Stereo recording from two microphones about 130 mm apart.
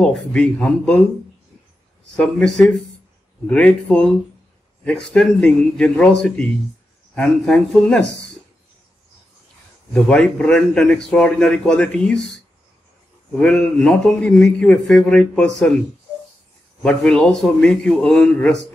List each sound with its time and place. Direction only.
0.0 s a man's voice: 5° left (ahead or behind)
2.1 s a man's voice: 5° left (ahead or behind)
9.9 s a man's voice: 5° left (ahead or behind)
13.4 s a man's voice: 5° left (ahead or behind)
16.8 s a man's voice: 5° left (ahead or behind)